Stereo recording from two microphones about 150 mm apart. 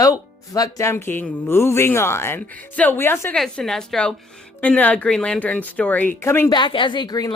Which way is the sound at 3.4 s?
5° left (ahead or behind).